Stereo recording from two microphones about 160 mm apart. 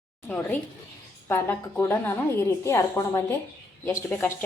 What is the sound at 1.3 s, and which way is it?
Speech, 15° left (ahead or behind).